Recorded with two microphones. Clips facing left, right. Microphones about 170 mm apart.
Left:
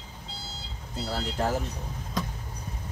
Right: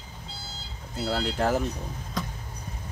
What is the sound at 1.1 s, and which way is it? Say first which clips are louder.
Speech: right 5 dB; 80° right.